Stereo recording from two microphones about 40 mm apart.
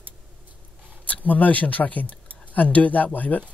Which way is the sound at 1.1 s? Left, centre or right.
Left.